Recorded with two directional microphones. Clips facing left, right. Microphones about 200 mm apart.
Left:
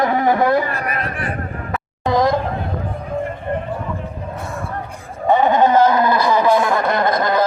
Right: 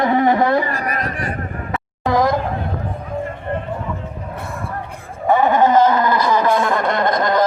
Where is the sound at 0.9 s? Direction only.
40° right (ahead or behind).